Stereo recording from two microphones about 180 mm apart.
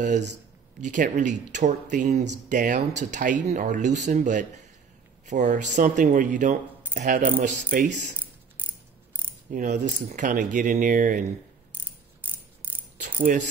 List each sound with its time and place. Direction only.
0.7 s speech: 45° right (ahead or behind)
9.5 s speech: 45° right (ahead or behind)
12.9 s mechanisms: 45° right (ahead or behind)